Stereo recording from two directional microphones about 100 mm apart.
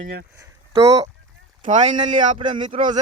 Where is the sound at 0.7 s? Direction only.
85° right.